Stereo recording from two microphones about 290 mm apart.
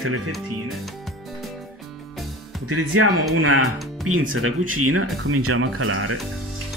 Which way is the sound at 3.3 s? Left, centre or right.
Right.